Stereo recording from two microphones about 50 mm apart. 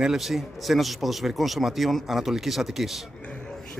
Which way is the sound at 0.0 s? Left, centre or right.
Centre.